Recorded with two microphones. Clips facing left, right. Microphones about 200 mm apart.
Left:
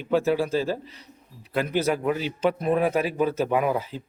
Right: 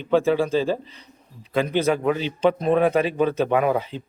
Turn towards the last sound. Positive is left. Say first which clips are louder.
# right 3 dB
turn(degrees=-70)  # may be behind; listen again after turning